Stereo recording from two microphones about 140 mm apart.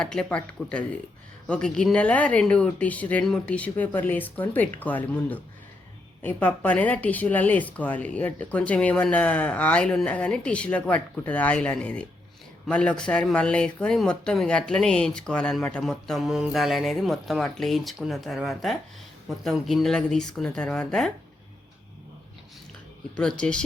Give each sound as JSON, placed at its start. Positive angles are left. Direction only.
{"t": 0.0, "sound": "speech", "side_deg": 5}
{"t": 23.4, "sound": "speech", "side_deg": 5}